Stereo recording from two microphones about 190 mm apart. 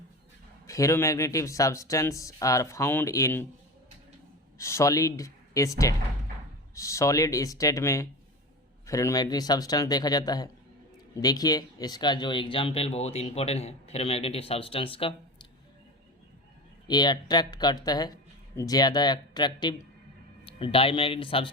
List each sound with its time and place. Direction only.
0.7 s speech: 15° left (ahead or behind)
4.5 s speech: 15° left (ahead or behind)
16.9 s speech: 20° left (ahead or behind)